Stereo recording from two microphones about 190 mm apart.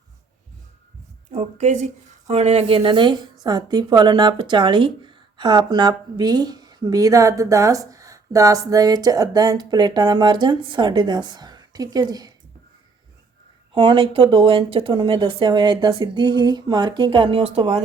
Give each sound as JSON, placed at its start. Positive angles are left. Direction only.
{"t": 1.3, "sound": "a woman's voice", "side_deg": -35}
{"t": 13.7, "sound": "a woman's voice", "side_deg": -25}